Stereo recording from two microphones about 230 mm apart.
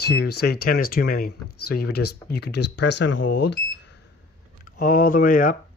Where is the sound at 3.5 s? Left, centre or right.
Left.